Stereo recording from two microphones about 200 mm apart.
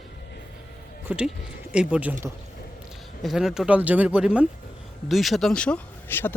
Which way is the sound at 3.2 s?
Centre (ahead or behind).